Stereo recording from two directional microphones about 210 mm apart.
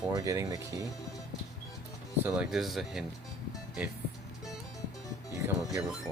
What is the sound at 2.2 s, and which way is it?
Speech, 5° right (ahead or behind).